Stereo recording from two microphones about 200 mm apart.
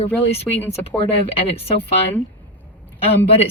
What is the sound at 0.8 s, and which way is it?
Speech, 30° left (ahead or behind).